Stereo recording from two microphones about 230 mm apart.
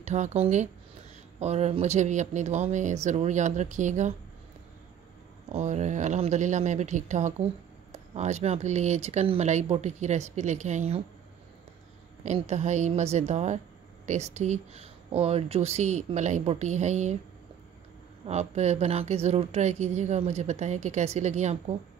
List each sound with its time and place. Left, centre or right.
0.0 s speech: right
5.5 s a woman's voice: right
12.2 s a woman's voice: right
18.2 s a woman's voice: right